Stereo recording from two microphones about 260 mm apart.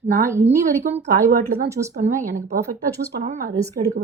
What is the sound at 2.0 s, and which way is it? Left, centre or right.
A woman's voice, right.